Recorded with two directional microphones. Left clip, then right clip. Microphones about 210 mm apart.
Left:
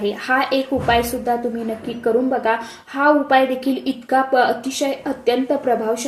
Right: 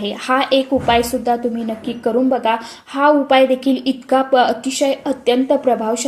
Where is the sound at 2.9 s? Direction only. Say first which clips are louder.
Right 2 dB; 25° right (ahead or behind).